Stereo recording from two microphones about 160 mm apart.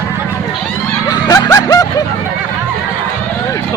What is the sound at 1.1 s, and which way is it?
Snicker, 20° left (ahead or behind).